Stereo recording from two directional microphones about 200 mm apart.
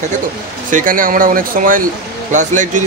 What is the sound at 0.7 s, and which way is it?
Speech, 40° right (ahead or behind).